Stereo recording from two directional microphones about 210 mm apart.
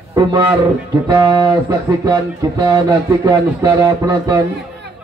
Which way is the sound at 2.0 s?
20° right (ahead or behind).